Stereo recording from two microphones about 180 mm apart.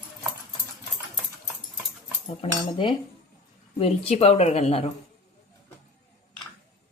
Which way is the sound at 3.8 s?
35° left (ahead or behind).